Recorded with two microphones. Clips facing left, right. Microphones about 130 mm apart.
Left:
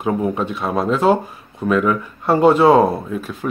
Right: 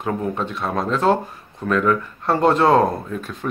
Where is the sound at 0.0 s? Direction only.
10° left (ahead or behind).